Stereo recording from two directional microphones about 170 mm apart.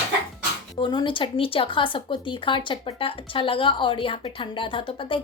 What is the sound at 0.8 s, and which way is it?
Speech, 25° left (ahead or behind).